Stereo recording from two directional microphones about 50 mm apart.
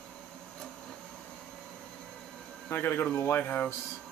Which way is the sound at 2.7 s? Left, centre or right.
Left.